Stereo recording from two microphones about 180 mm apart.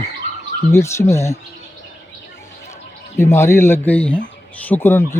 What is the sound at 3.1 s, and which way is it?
Speech, 15° left (ahead or behind).